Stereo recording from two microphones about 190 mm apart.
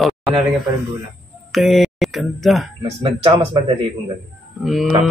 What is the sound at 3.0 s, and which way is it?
Speech, 30° right (ahead or behind).